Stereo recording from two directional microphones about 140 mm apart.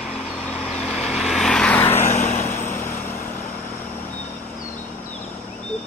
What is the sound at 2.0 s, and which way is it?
Vehicle, 60° left (ahead or behind).